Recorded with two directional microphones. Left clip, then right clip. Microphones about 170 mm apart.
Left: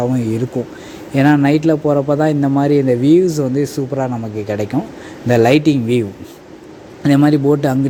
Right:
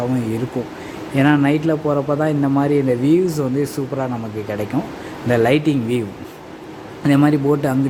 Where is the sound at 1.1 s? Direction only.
30° left (ahead or behind).